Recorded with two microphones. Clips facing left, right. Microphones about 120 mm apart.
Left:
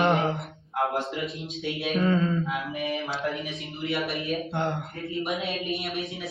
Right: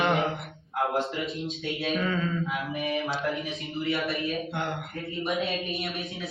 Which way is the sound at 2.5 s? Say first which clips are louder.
Even; centre (ahead or behind).